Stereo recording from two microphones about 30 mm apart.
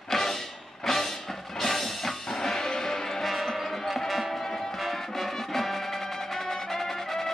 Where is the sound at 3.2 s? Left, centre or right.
Centre.